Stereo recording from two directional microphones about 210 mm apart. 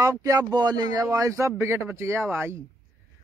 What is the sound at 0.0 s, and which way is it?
Speech, 15° right (ahead or behind).